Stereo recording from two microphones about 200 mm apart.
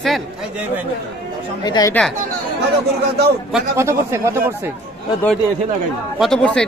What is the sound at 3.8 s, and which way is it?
Speech, 15° right (ahead or behind).